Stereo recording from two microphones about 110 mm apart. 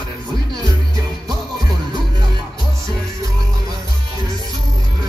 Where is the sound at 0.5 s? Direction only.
35° right (ahead or behind).